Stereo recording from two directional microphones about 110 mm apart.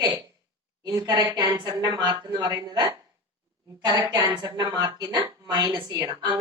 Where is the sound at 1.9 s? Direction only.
35° right (ahead or behind).